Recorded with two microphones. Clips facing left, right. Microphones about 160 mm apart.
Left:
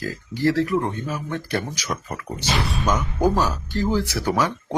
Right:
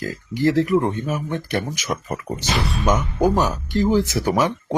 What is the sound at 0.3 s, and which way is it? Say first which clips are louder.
Speech: right 3 dB; 15° right (ahead or behind).